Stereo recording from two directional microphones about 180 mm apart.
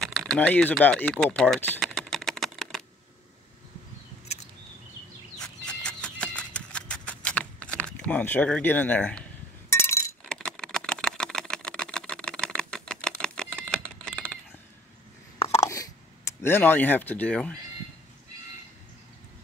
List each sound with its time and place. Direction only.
0.0 s typing: 5° left (ahead or behind)
5.4 s horse: 5° left (ahead or behind)
9.7 s chink: 15° left (ahead or behind)
10.2 s typing: 5° left (ahead or behind)
15.3 s a sound: 35° left (ahead or behind)
15.6 s a sound: 20° left (ahead or behind)